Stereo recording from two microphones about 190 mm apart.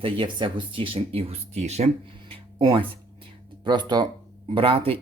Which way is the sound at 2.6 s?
25° right (ahead or behind).